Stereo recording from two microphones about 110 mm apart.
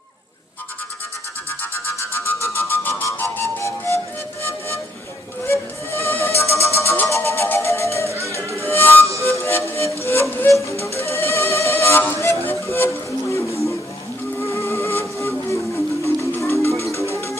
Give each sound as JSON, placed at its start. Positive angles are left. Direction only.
{"t": 1.6, "sound": "music", "side_deg": 20}
{"t": 8.4, "sound": "music", "side_deg": -25}
{"t": 8.6, "sound": "music", "side_deg": 20}